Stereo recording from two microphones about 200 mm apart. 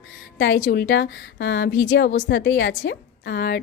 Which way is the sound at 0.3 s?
65° left (ahead or behind).